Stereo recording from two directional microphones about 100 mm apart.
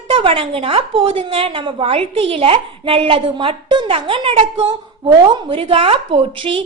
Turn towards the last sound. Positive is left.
turn(degrees=-65)  # may be behind; listen again after turning